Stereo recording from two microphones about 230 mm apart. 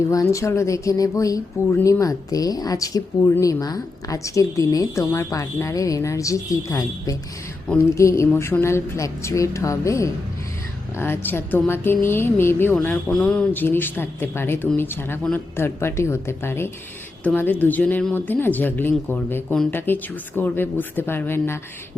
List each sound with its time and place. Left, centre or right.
0.1 s speech: centre